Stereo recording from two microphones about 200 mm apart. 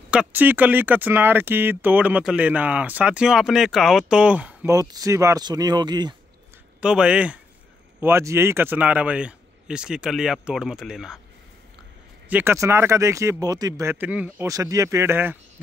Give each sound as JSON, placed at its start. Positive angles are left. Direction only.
{"t": 0.1, "sound": "speech", "side_deg": -5}
{"t": 6.8, "sound": "speech", "side_deg": -5}
{"t": 12.3, "sound": "speech", "side_deg": -10}